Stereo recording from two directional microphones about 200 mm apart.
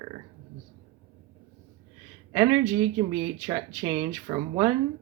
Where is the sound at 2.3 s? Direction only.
10° right (ahead or behind).